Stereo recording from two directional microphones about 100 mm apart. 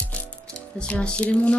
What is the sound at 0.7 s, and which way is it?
Speech, 10° left (ahead or behind).